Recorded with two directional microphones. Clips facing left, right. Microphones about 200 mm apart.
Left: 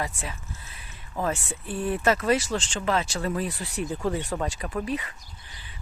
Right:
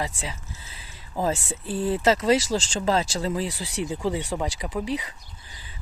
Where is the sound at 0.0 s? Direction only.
20° right (ahead or behind).